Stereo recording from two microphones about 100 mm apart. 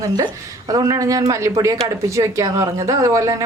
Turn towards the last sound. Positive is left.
turn(degrees=-35)  # may be behind; listen again after turning